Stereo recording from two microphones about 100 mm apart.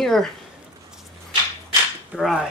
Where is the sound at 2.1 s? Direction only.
Centre (ahead or behind).